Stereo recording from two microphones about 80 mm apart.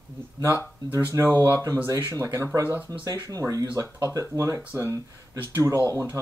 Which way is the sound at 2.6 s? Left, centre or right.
Left.